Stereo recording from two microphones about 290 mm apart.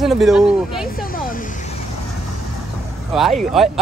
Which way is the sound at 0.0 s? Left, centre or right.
Centre.